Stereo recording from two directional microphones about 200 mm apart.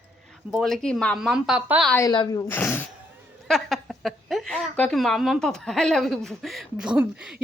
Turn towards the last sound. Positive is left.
turn(degrees=-5)  # may be behind; listen again after turning